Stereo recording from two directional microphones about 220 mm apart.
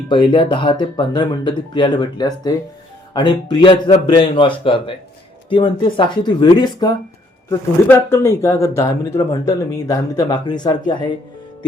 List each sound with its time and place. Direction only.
0.1 s speech: 20° left (ahead or behind)